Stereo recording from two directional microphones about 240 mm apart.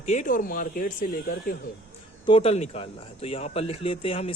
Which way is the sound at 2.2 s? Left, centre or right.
Left.